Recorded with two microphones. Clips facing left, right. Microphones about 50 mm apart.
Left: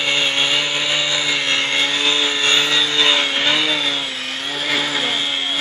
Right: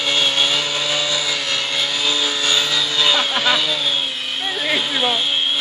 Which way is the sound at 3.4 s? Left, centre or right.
Left.